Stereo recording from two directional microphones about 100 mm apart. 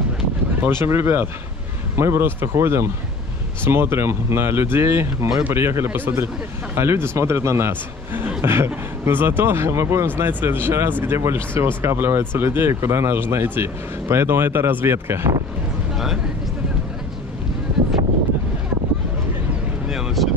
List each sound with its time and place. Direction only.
0.8 s speech: 25° right (ahead or behind)
19.9 s vehicle: 5° right (ahead or behind)